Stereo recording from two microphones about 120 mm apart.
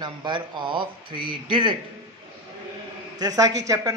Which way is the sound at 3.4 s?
30° right (ahead or behind).